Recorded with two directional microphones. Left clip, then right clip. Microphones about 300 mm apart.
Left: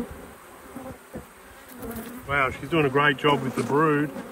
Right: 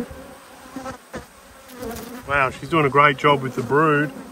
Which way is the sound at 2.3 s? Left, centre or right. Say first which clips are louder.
Right 4 dB; right.